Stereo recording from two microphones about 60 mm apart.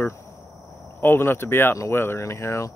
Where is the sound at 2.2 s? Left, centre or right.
Left.